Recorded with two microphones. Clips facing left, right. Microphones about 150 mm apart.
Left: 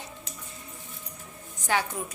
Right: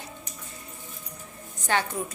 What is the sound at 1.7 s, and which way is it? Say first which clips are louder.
Speech: right 1 dB; 5° left (ahead or behind).